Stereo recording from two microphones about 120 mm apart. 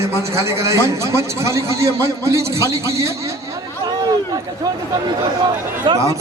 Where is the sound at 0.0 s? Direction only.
25° right (ahead or behind).